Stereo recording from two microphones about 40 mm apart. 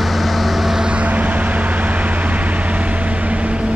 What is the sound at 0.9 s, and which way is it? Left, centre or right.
Vehicle, right.